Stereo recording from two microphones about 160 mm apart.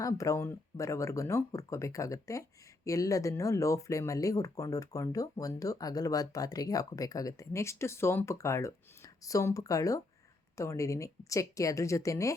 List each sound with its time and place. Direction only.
0.0 s speech: 20° left (ahead or behind)